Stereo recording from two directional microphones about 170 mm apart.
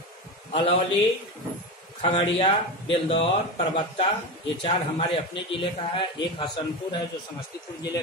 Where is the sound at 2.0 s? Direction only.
30° left (ahead or behind).